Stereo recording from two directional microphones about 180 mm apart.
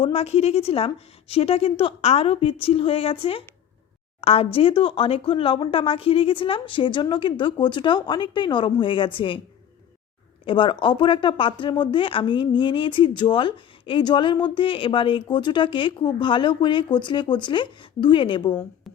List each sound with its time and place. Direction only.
0.0 s a woman's voice: 35° left (ahead or behind)
10.4 s speech: 30° left (ahead or behind)